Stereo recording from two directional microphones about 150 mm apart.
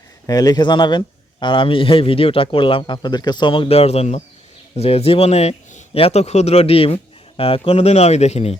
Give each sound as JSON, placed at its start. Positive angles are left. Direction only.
{"t": 0.3, "sound": "speech", "side_deg": 25}